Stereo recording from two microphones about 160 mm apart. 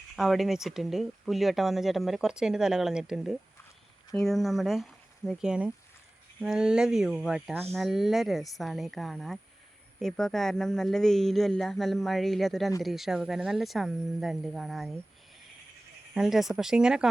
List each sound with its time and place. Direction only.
0.2 s speech: centre (ahead or behind)
16.1 s speech: centre (ahead or behind)